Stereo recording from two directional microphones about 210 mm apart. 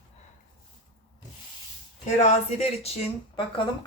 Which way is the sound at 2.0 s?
35° left (ahead or behind).